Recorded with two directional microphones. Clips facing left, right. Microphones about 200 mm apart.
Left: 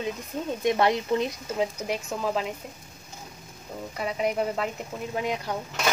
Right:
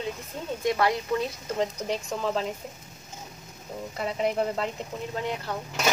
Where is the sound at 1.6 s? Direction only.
5° left (ahead or behind).